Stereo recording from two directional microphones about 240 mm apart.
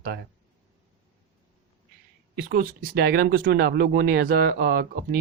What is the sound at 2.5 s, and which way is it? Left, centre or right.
Speech, right.